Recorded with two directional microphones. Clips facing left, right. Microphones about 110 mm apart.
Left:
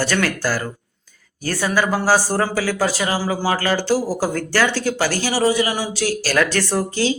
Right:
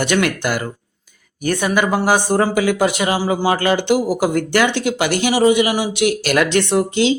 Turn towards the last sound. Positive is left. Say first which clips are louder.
# right 4 dB
turn(degrees=-20)  # may be behind; listen again after turning